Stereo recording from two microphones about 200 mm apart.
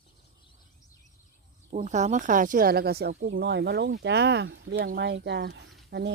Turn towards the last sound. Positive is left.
turn(degrees=-55)  # may be behind; listen again after turning